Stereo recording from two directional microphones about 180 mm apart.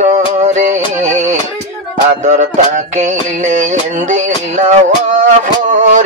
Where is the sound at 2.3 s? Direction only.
40° right (ahead or behind).